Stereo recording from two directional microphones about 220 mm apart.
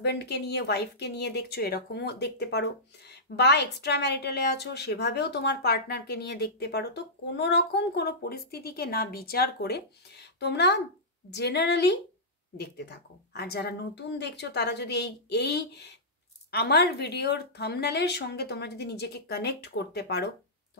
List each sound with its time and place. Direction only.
0.0 s a woman's voice: 50° left (ahead or behind)